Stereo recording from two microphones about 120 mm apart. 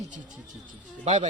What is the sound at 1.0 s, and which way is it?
Speech, 75° right (ahead or behind).